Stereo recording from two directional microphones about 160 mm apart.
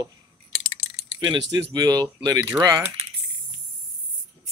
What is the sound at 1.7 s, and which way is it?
Speech, 25° right (ahead or behind).